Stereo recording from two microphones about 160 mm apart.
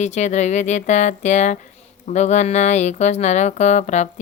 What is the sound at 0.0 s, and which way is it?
Speech, 45° left (ahead or behind).